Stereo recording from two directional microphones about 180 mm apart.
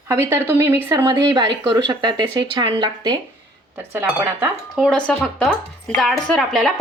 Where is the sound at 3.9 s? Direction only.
10° right (ahead or behind).